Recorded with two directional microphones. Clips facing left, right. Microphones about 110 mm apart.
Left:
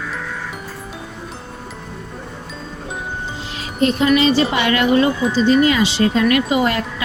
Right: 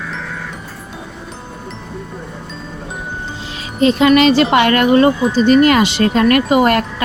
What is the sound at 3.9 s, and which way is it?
Speech, 75° right (ahead or behind).